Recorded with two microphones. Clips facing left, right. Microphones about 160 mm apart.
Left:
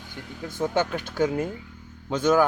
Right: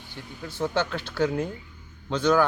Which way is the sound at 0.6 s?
10° left (ahead or behind).